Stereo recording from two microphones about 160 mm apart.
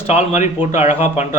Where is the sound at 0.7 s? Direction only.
45° left (ahead or behind).